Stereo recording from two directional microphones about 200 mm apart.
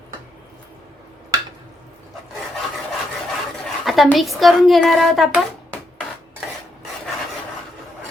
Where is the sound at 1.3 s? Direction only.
20° right (ahead or behind).